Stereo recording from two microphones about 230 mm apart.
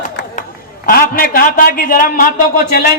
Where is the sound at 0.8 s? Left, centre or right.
Left.